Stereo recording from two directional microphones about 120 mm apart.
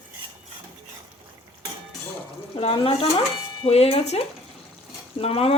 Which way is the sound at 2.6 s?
50° left (ahead or behind).